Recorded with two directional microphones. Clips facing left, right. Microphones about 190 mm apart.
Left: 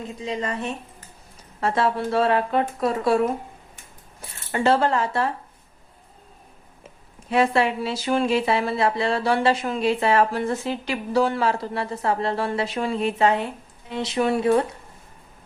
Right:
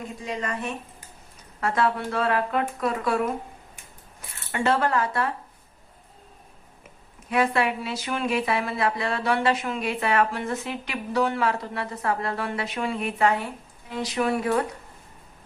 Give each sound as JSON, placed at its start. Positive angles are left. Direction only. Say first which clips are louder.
{"t": 0.2, "sound": "speech", "louder": "left 3 dB", "side_deg": 25}
{"t": 4.5, "sound": "speech", "louder": "left 3 dB", "side_deg": 30}
{"t": 7.3, "sound": "speech", "louder": "left 3 dB", "side_deg": 30}